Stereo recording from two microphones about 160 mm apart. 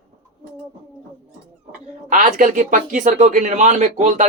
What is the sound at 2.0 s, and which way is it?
Speech, 55° right (ahead or behind).